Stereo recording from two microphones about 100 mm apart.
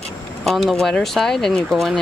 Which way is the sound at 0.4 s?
Centre (ahead or behind).